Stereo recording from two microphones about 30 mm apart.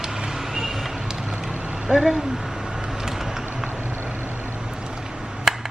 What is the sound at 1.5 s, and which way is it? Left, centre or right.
Vehicle, right.